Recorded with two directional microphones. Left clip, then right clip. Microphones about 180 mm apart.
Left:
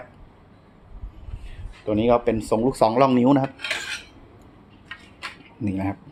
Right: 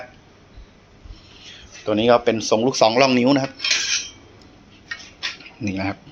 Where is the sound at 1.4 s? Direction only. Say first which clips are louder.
Right 3 dB; 5° left (ahead or behind); by 3.4 s 25° left (ahead or behind).